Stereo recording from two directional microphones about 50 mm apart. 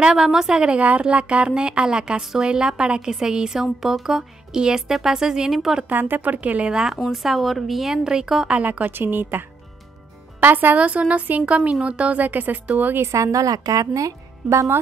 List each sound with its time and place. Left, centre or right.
0.0 s a woman's voice: centre
0.7 s a woman's voice: right; by 5.9 s centre
5.9 s speech: right
6.7 s a woman's voice: centre
8.5 s speech: right
8.9 s a woman's voice: right
10.4 s speech: right
10.8 s a woman's voice: right
12.2 s speech: right
13.1 s speech: right
14.5 s speech: right